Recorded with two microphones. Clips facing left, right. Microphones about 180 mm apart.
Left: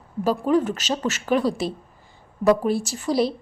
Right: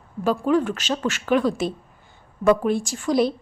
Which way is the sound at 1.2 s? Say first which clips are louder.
Right 1 dB; centre (ahead or behind).